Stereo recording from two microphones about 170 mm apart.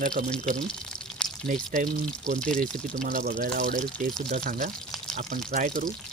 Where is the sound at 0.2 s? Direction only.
55° right (ahead or behind).